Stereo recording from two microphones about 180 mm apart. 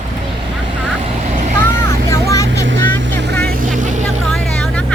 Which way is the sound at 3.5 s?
50° right (ahead or behind).